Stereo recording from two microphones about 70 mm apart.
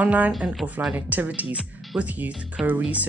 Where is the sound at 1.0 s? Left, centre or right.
Right.